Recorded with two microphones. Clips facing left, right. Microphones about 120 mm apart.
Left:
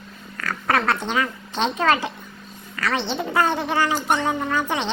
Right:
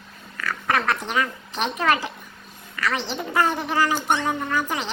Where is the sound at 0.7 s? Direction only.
25° left (ahead or behind).